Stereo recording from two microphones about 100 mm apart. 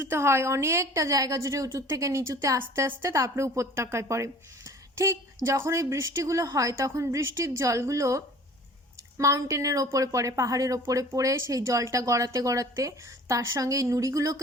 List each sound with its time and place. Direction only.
0.0 s a woman's voice: 25° right (ahead or behind)